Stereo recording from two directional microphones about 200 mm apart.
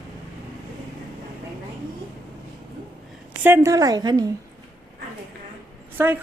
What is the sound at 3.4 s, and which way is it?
Speech, 15° right (ahead or behind).